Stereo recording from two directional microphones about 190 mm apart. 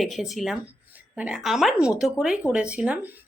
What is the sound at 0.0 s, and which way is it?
Speech, centre (ahead or behind).